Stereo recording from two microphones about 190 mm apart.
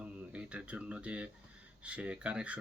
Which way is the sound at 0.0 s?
5° right (ahead or behind).